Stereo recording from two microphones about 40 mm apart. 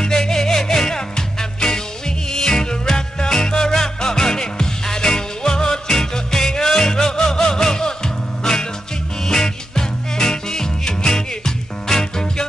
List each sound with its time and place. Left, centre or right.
0.0 s music: centre